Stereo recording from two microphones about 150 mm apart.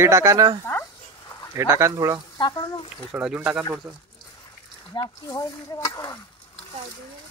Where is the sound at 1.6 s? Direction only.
20° right (ahead or behind).